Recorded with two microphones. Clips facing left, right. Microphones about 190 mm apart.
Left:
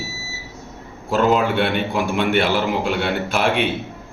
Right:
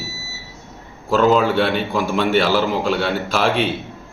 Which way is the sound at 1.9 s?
20° left (ahead or behind).